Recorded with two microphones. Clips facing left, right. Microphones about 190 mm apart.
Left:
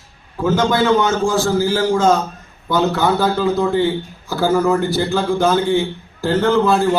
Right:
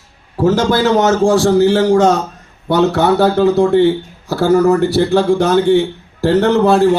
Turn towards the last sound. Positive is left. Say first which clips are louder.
# right 4 dB
turn(degrees=-70)  # may be behind; listen again after turning